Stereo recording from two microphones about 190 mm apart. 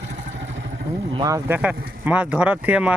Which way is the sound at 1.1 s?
20° right (ahead or behind).